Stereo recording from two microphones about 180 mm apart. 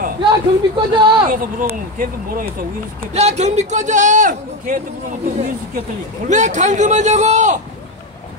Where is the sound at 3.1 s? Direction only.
40° right (ahead or behind).